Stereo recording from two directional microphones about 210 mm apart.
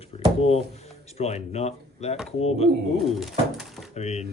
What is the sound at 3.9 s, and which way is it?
Speech, 30° left (ahead or behind).